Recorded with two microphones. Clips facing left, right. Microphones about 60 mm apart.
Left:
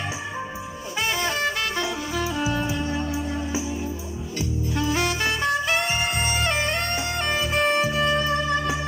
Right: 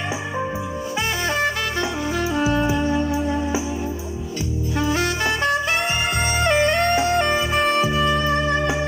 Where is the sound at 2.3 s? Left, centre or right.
Right.